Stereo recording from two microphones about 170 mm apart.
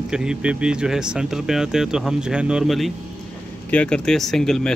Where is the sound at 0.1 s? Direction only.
5° right (ahead or behind).